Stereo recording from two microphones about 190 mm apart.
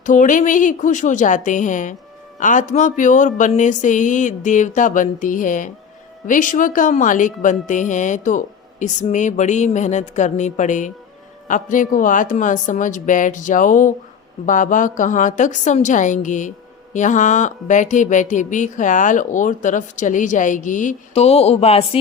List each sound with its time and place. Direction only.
0.0 s speech: 40° left (ahead or behind)